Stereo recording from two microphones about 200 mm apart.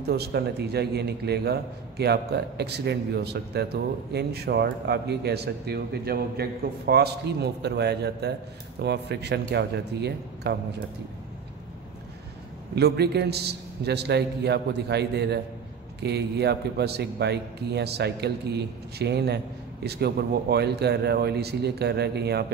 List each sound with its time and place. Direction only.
0.1 s a man's voice: 55° right (ahead or behind)
12.7 s a man's voice: 55° right (ahead or behind)